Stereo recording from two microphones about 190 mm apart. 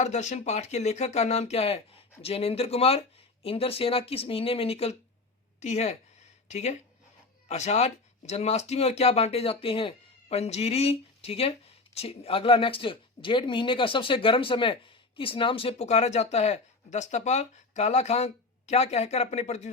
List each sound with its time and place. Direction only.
0.0 s speech: 35° left (ahead or behind)